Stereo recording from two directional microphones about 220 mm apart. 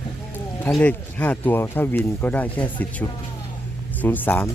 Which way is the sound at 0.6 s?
5° left (ahead or behind).